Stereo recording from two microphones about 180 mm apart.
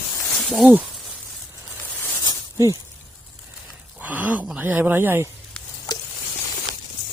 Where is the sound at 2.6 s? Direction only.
15° right (ahead or behind).